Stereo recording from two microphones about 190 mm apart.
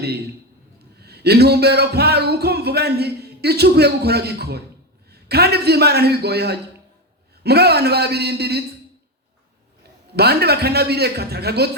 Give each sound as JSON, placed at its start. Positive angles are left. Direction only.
{"t": 0.9, "sound": "music", "side_deg": -60}
{"t": 10.2, "sound": "music", "side_deg": -55}